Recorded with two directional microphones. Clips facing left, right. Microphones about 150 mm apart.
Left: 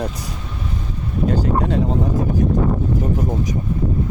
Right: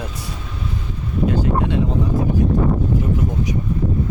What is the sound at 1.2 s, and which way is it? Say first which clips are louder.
Speech: even; 40° left (ahead or behind).